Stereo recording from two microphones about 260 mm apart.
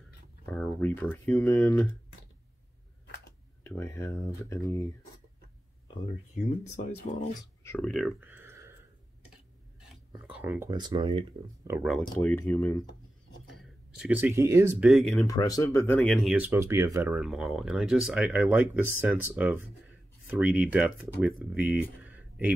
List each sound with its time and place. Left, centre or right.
0.5 s speech: centre
3.6 s speech: centre
7.1 s speech: left
7.6 s speech: centre
10.3 s speech: centre
12.2 s speech: centre
13.6 s speech: centre
15.2 s speech: centre